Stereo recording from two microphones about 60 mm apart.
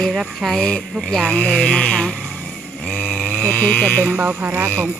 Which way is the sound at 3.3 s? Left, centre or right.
Left.